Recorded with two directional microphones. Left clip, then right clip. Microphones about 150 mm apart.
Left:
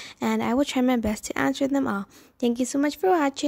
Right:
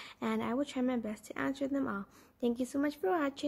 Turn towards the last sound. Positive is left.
turn(degrees=55)  # may be behind; listen again after turning